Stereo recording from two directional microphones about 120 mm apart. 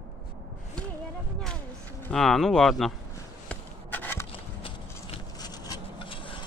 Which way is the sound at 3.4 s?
15° left (ahead or behind).